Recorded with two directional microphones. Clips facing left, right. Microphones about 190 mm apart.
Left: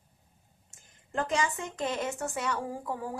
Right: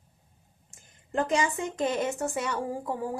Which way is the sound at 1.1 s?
15° right (ahead or behind).